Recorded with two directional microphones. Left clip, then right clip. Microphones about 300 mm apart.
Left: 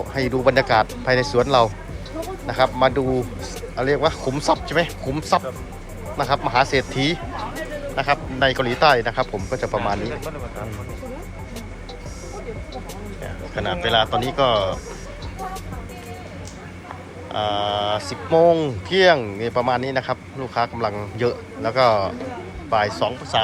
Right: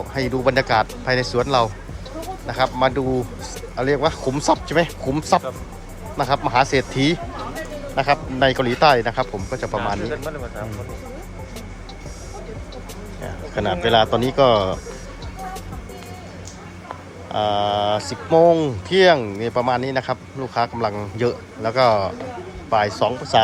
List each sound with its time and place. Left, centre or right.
0.1 s speech: centre
13.2 s speech: centre
17.2 s speech: centre